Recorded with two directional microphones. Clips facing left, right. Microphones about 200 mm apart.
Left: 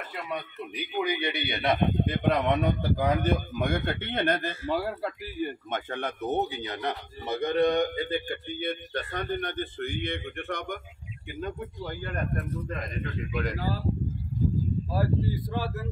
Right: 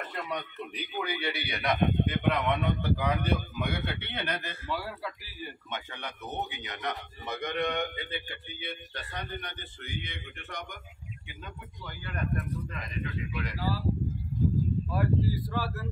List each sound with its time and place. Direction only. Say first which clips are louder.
0.1 s a man's voice: left 1 dB; 5° left (ahead or behind)
0.9 s a man's voice: left 5 dB; 15° left (ahead or behind); by 13.8 s 45° left (ahead or behind)
15.3 s speech: left 2 dB; 20° left (ahead or behind)